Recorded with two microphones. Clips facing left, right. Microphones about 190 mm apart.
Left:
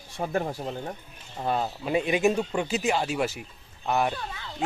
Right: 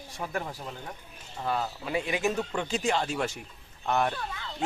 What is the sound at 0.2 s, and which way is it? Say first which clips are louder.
Speech: left 6 dB; 30° left (ahead or behind).